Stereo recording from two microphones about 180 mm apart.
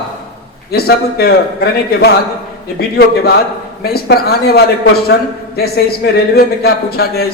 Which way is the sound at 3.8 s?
60° left (ahead or behind).